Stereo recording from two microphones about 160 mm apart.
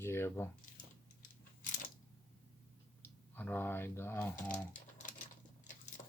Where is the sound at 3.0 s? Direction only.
10° left (ahead or behind).